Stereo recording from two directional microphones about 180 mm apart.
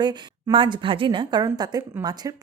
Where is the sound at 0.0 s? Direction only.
25° right (ahead or behind).